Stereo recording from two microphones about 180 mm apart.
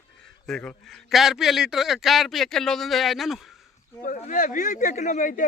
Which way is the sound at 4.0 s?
40° left (ahead or behind).